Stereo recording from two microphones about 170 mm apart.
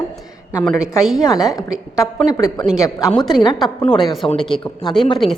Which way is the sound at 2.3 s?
20° left (ahead or behind).